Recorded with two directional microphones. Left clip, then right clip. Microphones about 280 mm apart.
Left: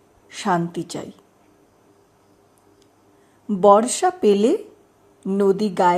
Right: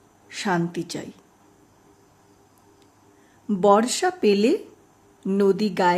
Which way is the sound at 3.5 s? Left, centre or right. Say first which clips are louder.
Left 4 dB; centre.